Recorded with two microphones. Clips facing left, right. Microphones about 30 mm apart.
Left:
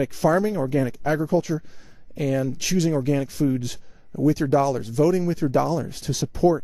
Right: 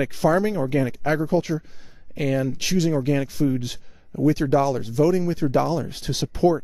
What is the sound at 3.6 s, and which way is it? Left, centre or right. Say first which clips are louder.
Speech: right 1 dB; centre.